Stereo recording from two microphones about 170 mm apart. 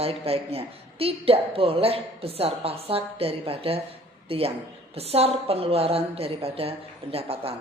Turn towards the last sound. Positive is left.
turn(degrees=-35)  # may be behind; listen again after turning